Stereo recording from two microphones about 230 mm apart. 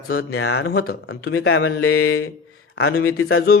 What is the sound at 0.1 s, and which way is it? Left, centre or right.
Speech, left.